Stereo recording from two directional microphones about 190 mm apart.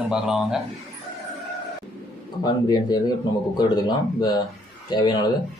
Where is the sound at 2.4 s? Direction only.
20° left (ahead or behind).